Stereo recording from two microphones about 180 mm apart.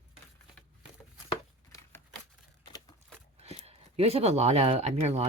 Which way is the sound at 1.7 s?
15° left (ahead or behind).